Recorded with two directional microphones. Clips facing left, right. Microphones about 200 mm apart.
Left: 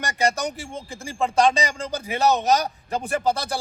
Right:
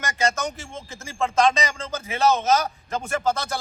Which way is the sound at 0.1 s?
35° left (ahead or behind).